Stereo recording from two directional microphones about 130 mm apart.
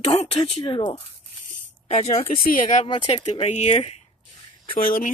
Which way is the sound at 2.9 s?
35° left (ahead or behind).